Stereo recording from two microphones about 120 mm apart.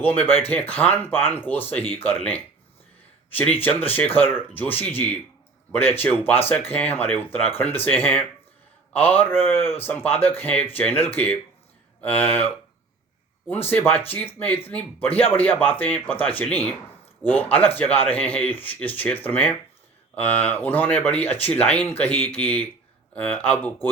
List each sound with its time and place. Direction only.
0.0 s speech: 15° left (ahead or behind)
3.3 s speech: 15° left (ahead or behind)
13.5 s speech: 15° left (ahead or behind)